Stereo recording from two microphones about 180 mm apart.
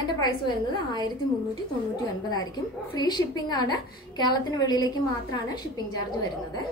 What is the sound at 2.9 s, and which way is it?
A woman's voice, 25° left (ahead or behind).